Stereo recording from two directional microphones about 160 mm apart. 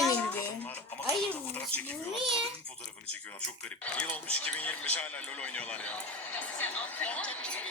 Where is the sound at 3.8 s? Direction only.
10° left (ahead or behind).